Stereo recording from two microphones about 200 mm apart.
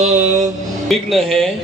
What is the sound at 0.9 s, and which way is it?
Speech, centre (ahead or behind).